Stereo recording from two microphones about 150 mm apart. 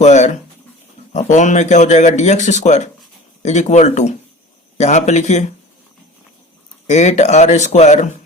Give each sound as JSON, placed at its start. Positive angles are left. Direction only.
{"t": 0.0, "sound": "speech", "side_deg": 50}
{"t": 6.8, "sound": "speech", "side_deg": 50}